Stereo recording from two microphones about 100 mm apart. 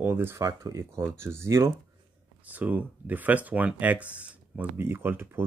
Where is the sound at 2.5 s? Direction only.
15° right (ahead or behind).